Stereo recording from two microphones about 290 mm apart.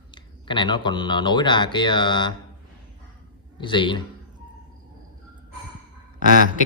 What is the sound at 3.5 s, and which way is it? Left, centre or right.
Speech, centre.